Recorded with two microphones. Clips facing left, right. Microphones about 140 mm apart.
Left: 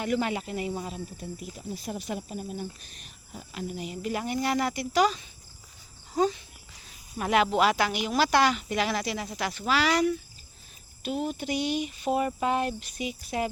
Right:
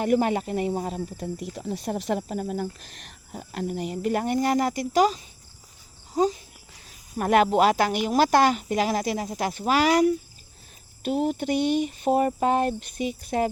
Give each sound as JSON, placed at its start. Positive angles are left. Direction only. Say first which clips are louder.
{"t": 0.0, "sound": "speech", "louder": "right 6 dB", "side_deg": -45}
{"t": 1.1, "sound": "speech", "louder": "right 6 dB", "side_deg": -80}
{"t": 3.3, "sound": "speech", "louder": "right 6 dB", "side_deg": -50}
{"t": 7.2, "sound": "speech", "louder": "right 4 dB", "side_deg": -50}
{"t": 11.0, "sound": "speech", "louder": "right 6 dB", "side_deg": -55}
{"t": 11.9, "sound": "speech", "louder": "right 5 dB", "side_deg": -45}